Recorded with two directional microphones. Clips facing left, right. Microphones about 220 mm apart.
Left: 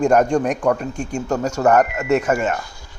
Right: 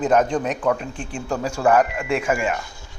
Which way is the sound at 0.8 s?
45° left (ahead or behind).